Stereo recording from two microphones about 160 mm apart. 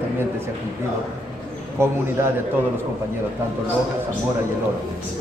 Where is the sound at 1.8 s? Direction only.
15° right (ahead or behind).